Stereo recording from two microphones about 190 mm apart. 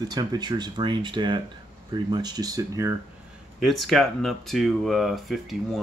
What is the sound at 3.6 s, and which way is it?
Speech, centre (ahead or behind).